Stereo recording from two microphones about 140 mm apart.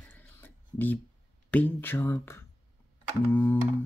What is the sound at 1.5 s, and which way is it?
Speech, 10° left (ahead or behind).